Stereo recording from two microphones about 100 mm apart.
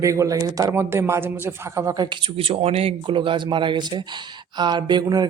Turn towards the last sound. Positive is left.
turn(degrees=-45)  # may be behind; listen again after turning